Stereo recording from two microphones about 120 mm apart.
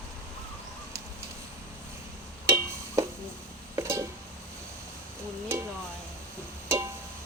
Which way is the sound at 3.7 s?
20° right (ahead or behind).